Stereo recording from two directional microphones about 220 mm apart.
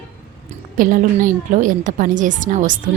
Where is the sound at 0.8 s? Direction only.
40° right (ahead or behind).